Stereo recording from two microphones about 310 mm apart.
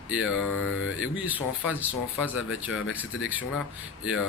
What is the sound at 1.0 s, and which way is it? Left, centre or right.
Speech, centre.